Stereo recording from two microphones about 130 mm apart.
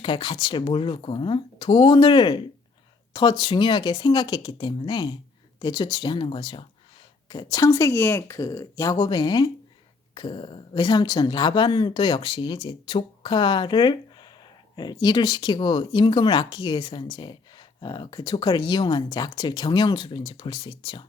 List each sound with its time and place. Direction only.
0.0 s speech: 35° left (ahead or behind)